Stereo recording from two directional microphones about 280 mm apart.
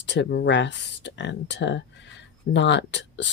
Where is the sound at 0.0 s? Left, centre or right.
Left.